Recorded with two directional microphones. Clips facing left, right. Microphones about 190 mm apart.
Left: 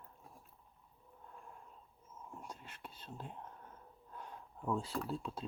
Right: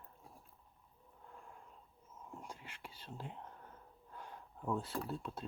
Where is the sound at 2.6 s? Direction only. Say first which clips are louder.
Left 1 dB; 10° right (ahead or behind).